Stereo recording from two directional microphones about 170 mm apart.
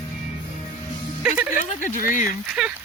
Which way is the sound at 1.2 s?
10° right (ahead or behind).